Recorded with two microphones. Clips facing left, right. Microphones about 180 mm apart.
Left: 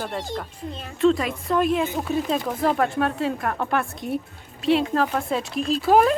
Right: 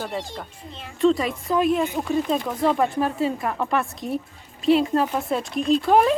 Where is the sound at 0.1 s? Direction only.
Centre (ahead or behind).